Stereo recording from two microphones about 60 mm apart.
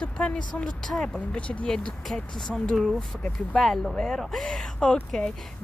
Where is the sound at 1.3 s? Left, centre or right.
Centre.